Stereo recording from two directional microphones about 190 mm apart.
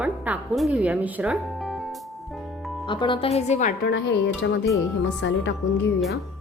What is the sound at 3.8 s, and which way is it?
A woman's voice, 60° left (ahead or behind).